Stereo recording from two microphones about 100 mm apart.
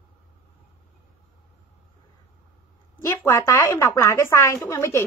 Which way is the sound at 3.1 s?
30° left (ahead or behind).